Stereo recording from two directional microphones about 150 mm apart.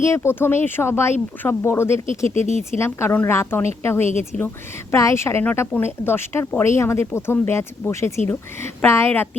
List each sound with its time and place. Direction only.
0.0 s a woman's voice: 20° left (ahead or behind)